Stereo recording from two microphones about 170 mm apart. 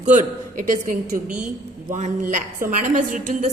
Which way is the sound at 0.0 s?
45° right (ahead or behind).